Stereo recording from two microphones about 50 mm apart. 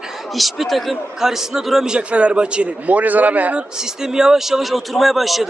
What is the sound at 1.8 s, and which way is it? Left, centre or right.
A man's voice, centre.